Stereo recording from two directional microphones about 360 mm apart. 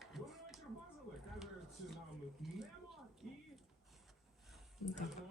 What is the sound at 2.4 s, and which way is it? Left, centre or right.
Speech, centre.